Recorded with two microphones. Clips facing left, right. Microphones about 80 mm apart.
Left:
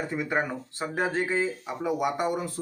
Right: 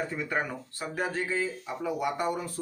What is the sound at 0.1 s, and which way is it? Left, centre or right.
A man's voice, centre.